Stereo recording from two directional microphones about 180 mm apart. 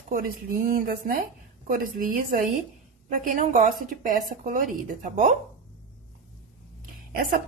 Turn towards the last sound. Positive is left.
turn(degrees=-50)  # may be behind; listen again after turning